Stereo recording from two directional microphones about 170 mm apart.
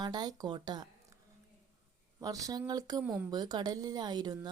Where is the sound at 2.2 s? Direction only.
20° right (ahead or behind).